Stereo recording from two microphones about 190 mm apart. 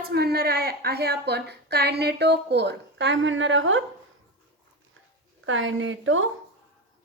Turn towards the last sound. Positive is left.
turn(degrees=-90)